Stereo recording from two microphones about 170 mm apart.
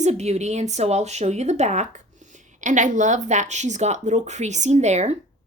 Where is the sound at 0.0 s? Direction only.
40° right (ahead or behind).